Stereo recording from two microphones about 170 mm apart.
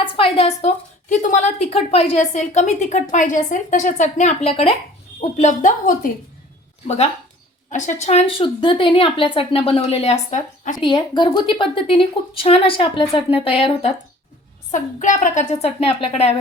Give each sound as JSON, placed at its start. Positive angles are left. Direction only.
{"t": 0.0, "sound": "a sound", "side_deg": 35}
{"t": 1.1, "sound": "a woman's voice", "side_deg": 45}
{"t": 5.4, "sound": "a woman's voice", "side_deg": 50}
{"t": 6.8, "sound": "a woman's voice", "side_deg": 40}
{"t": 10.8, "sound": "a woman's voice", "side_deg": 25}
{"t": 14.7, "sound": "a woman's voice", "side_deg": 45}
{"t": 15.6, "sound": "a woman's voice", "side_deg": 35}